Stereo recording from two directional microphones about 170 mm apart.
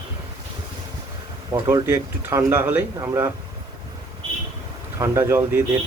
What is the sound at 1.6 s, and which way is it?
Speech, 15° right (ahead or behind).